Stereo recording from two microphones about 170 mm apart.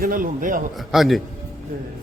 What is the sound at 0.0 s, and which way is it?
Speech, 55° right (ahead or behind).